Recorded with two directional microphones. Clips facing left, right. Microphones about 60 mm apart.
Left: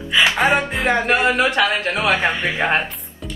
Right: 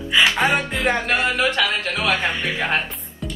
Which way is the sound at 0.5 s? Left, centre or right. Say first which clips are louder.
Left 2 dB; left.